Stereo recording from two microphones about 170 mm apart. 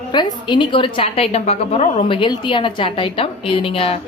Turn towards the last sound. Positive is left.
turn(degrees=30)  # may be behind; listen again after turning